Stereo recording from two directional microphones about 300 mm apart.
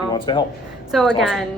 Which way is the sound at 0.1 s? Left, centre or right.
Centre.